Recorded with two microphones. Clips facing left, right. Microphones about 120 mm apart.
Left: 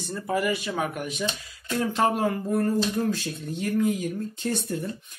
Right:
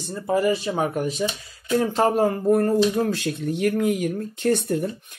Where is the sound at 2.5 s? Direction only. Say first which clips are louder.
Right 8 dB; 65° right (ahead or behind).